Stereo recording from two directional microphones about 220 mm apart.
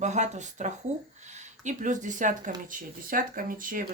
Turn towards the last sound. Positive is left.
turn(degrees=-40)  # may be behind; listen again after turning